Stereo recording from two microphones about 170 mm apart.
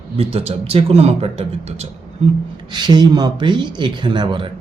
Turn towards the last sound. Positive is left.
turn(degrees=-25)  # may be behind; listen again after turning